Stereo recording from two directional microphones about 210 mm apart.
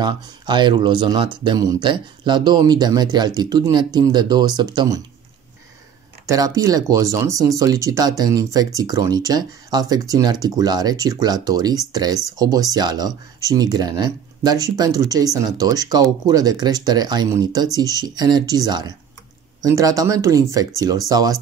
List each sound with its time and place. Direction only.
0.0 s speech: 20° right (ahead or behind)
6.2 s speech: 15° right (ahead or behind)